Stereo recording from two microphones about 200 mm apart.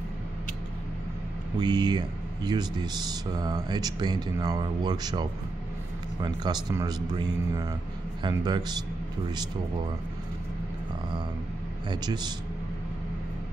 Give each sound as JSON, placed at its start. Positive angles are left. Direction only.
{"t": 1.6, "sound": "speech", "side_deg": -20}
{"t": 6.2, "sound": "speech", "side_deg": -20}
{"t": 11.9, "sound": "speech", "side_deg": -20}